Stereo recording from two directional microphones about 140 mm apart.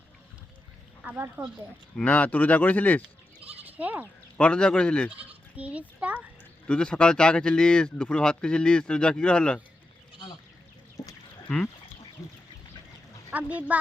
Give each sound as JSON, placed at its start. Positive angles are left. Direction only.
{"t": 1.0, "sound": "a child's voice", "side_deg": -10}
{"t": 2.0, "sound": "speech", "side_deg": 10}
{"t": 3.6, "sound": "speech", "side_deg": -10}
{"t": 4.4, "sound": "speech", "side_deg": 10}
{"t": 5.5, "sound": "a child's voice", "side_deg": -10}
{"t": 6.7, "sound": "speech", "side_deg": 5}
{"t": 11.0, "sound": "livestock", "side_deg": 25}
{"t": 11.4, "sound": "speech", "side_deg": 10}
{"t": 13.3, "sound": "a child's voice", "side_deg": -10}